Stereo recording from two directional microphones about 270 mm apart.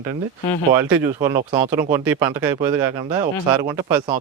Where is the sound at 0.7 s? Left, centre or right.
Centre.